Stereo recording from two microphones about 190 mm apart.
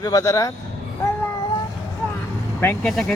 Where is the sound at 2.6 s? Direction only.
10° left (ahead or behind).